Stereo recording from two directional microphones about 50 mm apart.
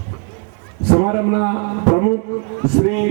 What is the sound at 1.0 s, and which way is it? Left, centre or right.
A man's voice, centre.